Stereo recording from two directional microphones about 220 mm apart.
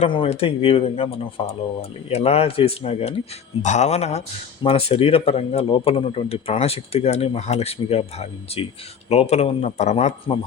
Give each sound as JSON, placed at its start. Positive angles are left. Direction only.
{"t": 0.0, "sound": "speech", "side_deg": 25}